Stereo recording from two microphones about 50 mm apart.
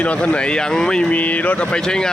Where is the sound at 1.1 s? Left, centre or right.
Left.